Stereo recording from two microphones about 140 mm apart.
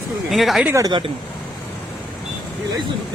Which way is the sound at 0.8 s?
35° right (ahead or behind).